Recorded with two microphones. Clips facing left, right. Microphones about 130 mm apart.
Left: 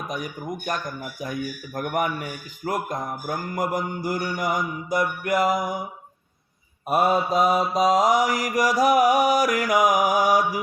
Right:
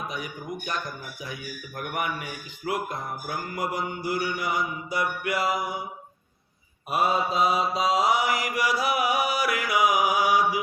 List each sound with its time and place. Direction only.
0.6 s a man's voice: 50° left (ahead or behind)
6.8 s a man's voice: 45° left (ahead or behind)